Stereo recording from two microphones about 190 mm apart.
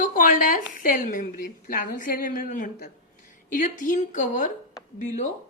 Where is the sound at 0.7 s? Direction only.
45° left (ahead or behind).